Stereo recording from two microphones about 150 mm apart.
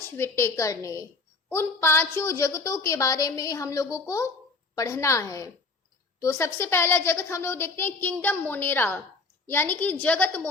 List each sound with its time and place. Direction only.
0.2 s a woman's voice: 20° left (ahead or behind)